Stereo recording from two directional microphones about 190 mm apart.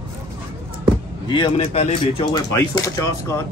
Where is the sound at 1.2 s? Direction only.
25° left (ahead or behind).